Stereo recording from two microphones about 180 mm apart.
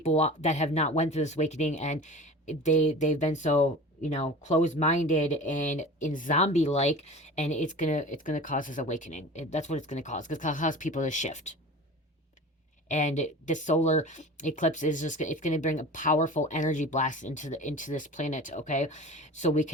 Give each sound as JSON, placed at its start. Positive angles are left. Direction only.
{"t": 0.0, "sound": "speech", "side_deg": 40}
{"t": 12.9, "sound": "speech", "side_deg": 40}